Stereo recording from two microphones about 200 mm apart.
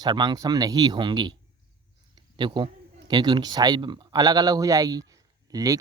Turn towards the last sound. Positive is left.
turn(degrees=-20)  # may be behind; listen again after turning